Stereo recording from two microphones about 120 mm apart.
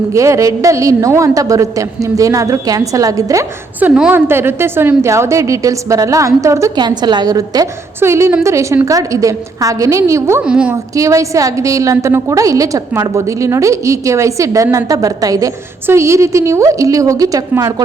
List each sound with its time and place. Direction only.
0.1 s a woman's voice: 25° right (ahead or behind)
3.8 s a woman's voice: 10° right (ahead or behind); by 6.7 s 25° right (ahead or behind)
6.7 s a woman's voice: 35° right (ahead or behind)
10.4 s a woman's voice: 10° right (ahead or behind)
10.9 s a woman's voice: 25° right (ahead or behind)